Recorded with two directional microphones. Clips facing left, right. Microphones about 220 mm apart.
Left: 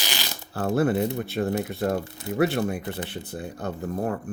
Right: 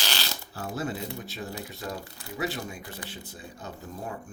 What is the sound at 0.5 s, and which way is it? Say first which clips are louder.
Speech: left 11 dB; 60° left (ahead or behind).